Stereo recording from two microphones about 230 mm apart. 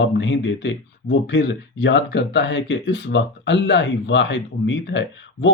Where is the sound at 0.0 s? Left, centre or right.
Left.